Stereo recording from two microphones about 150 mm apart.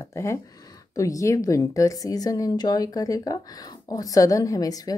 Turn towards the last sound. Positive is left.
turn(degrees=25)  # may be behind; listen again after turning